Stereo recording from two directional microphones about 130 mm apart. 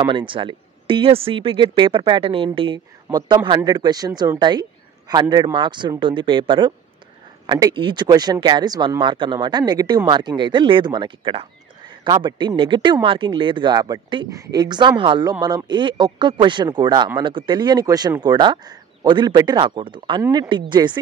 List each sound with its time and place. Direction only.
0.0 s speech: 40° right (ahead or behind)